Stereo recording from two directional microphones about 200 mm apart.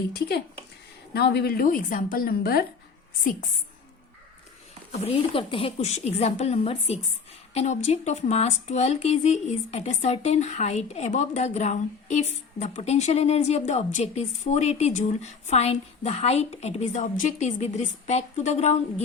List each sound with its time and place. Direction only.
0.1 s a woman's voice: 55° left (ahead or behind)
4.9 s speech: 30° left (ahead or behind)